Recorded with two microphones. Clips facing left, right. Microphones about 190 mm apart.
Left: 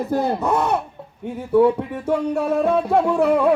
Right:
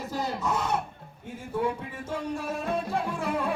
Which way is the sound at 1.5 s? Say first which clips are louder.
Left 14 dB; 65° left (ahead or behind).